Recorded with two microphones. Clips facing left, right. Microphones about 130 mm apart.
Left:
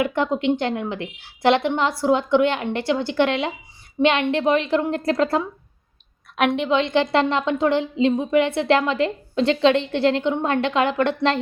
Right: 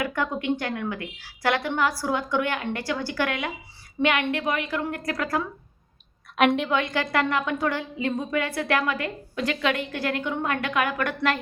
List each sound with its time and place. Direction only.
0.0 s a woman's voice: 25° left (ahead or behind)
6.3 s a woman's voice: centre (ahead or behind)
6.7 s a woman's voice: 25° left (ahead or behind)